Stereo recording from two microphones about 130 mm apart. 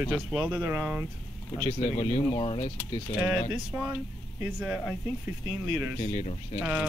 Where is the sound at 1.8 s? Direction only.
60° left (ahead or behind).